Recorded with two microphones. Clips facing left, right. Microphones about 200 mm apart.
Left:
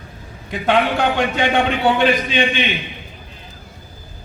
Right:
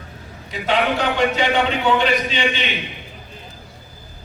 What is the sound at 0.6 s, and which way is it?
A man's voice, 55° left (ahead or behind).